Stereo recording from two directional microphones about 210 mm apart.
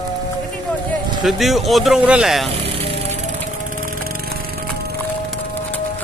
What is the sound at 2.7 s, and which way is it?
Music, 25° right (ahead or behind).